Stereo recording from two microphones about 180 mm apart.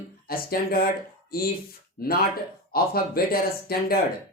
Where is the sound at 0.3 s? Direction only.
55° left (ahead or behind).